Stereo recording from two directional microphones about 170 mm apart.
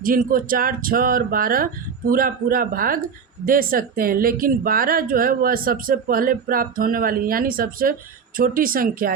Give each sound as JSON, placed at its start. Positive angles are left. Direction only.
{"t": 0.0, "sound": "speech", "side_deg": -55}